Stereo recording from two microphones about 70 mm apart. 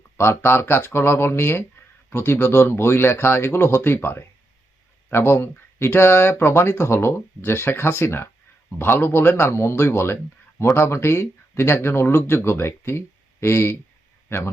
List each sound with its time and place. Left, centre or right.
0.2 s speech: left